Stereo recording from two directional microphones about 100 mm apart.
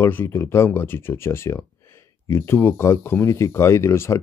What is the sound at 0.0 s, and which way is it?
Speech, 20° left (ahead or behind).